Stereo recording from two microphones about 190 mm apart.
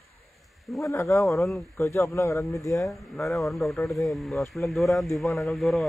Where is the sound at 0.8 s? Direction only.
15° left (ahead or behind).